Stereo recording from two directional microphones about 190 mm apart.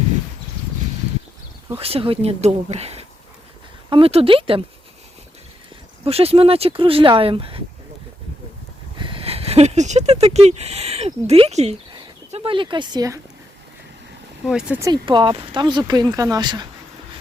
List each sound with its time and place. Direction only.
1.8 s speech: 30° right (ahead or behind)
6.1 s speech: 30° right (ahead or behind)
9.0 s speech: 25° right (ahead or behind)
14.4 s speech: 5° right (ahead or behind)
14.8 s speech: 20° right (ahead or behind)